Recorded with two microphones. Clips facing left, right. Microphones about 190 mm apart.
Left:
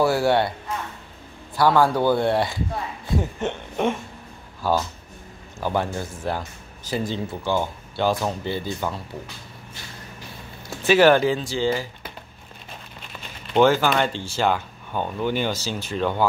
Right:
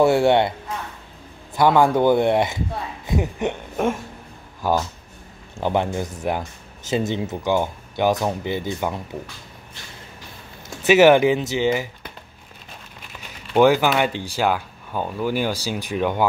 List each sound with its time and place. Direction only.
0.0 s speech: 25° right (ahead or behind)
1.6 s speech: 20° right (ahead or behind)
10.8 s speech: 15° right (ahead or behind)
13.5 s speech: 10° right (ahead or behind)